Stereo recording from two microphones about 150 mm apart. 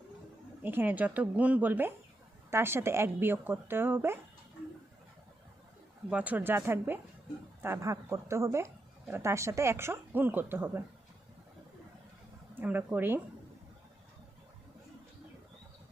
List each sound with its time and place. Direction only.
0.6 s speech: 15° right (ahead or behind)
6.1 s speech: 10° right (ahead or behind)
12.5 s speech: 10° right (ahead or behind)